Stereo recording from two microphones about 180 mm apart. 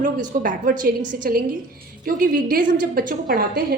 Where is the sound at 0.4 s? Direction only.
45° right (ahead or behind).